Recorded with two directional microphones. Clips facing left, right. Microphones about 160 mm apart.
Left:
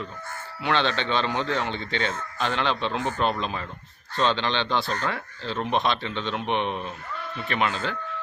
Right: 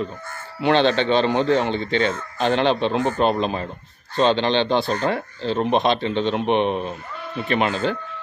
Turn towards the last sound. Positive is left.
turn(degrees=-20)  # may be behind; listen again after turning